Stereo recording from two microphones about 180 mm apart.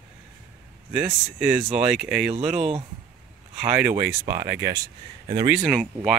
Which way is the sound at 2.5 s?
35° right (ahead or behind).